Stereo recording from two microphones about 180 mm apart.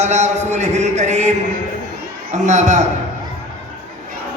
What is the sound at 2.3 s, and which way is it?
Speech, 40° right (ahead or behind).